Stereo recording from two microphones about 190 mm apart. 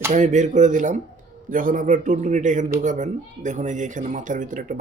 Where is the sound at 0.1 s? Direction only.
40° right (ahead or behind).